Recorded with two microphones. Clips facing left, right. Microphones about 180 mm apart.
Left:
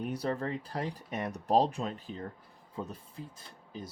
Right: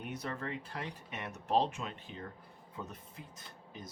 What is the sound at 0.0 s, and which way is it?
Speech, 35° left (ahead or behind).